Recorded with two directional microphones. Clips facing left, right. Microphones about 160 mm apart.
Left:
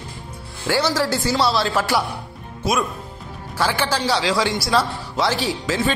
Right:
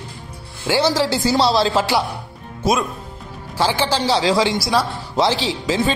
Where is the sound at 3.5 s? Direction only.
30° right (ahead or behind).